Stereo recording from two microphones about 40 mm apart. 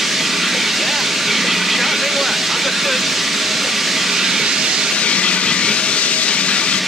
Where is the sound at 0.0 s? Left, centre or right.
Centre.